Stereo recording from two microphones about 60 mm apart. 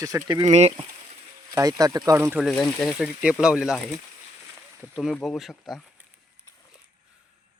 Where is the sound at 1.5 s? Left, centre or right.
Right.